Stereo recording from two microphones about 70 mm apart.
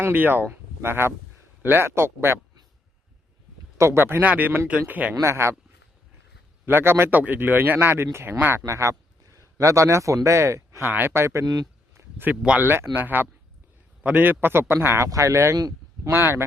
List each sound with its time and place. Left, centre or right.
0.0 s speech: right
3.8 s speech: right; by 5.1 s centre
5.2 s speech: right
6.7 s speech: right
8.6 s speech: right
10.8 s speech: right
11.4 s speech: right
11.9 s a sound: right
12.5 s speech: right
14.9 s speech: right